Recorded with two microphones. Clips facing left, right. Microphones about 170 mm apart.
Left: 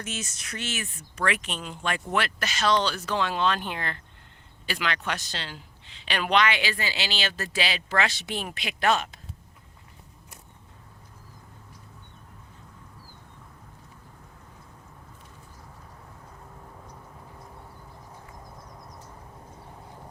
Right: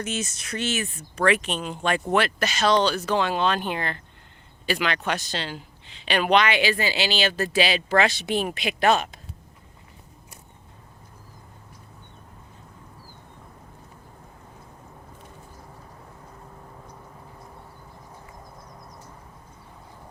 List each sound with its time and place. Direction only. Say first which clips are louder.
0.0 s speech: right 6 dB; 20° right (ahead or behind)
2.7 s speech: right 4 dB; 50° right (ahead or behind)
3.2 s speech: even; 15° right (ahead or behind)